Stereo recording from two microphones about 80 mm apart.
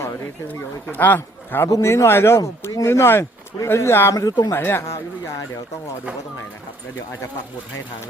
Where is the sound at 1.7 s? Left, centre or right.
Left.